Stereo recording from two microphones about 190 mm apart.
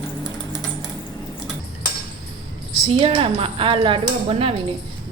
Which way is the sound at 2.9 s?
30° right (ahead or behind).